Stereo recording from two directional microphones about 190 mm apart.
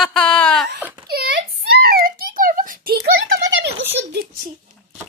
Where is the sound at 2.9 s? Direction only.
70° right (ahead or behind).